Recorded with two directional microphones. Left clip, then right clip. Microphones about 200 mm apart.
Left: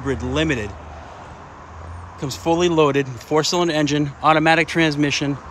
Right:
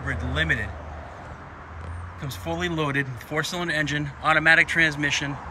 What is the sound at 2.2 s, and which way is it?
Speech, 15° left (ahead or behind).